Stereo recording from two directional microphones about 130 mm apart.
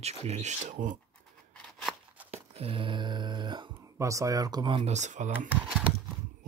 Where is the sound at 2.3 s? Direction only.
50° right (ahead or behind).